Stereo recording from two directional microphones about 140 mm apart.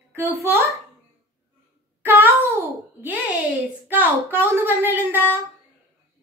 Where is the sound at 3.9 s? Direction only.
15° right (ahead or behind).